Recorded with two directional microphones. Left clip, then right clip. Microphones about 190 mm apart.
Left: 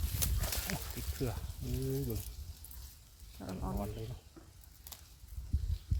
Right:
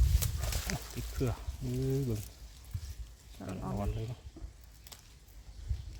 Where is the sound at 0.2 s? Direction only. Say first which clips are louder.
Left 2 dB; centre (ahead or behind).